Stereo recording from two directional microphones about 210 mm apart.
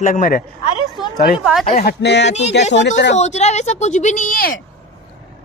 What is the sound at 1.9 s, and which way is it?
Speech, 55° left (ahead or behind).